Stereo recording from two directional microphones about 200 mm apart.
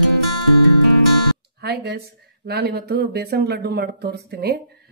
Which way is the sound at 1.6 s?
55° right (ahead or behind).